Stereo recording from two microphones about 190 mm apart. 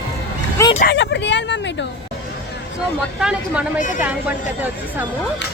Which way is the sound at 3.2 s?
5° right (ahead or behind).